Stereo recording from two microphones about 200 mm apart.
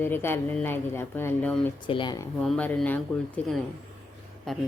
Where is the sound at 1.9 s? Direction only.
20° left (ahead or behind).